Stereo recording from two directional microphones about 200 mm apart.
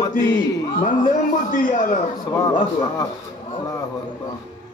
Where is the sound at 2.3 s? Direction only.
20° left (ahead or behind).